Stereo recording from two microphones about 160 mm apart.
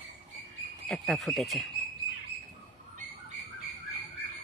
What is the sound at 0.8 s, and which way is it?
Speech, centre (ahead or behind).